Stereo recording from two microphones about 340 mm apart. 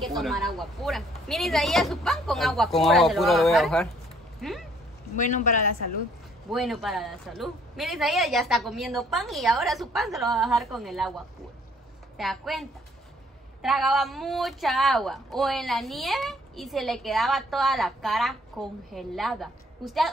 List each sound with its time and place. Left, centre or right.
0.0 s speech: centre
5.1 s speech: left
6.5 s speech: centre
12.2 s speech: centre